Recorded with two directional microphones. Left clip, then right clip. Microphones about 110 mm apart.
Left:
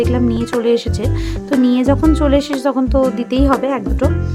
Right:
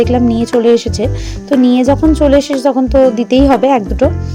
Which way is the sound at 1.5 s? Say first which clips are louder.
Right 4 dB; 30° right (ahead or behind).